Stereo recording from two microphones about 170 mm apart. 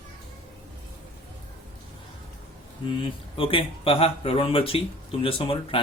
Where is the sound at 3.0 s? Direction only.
30° left (ahead or behind).